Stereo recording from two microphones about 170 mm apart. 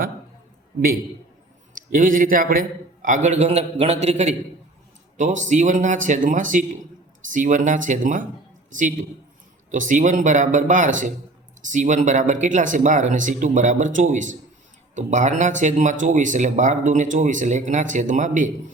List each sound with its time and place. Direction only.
1.7 s speech: 50° right (ahead or behind)